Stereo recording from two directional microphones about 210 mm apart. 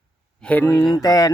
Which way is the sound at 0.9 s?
20° left (ahead or behind).